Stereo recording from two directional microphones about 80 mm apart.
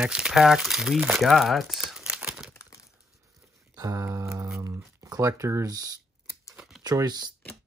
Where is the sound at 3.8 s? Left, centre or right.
Right.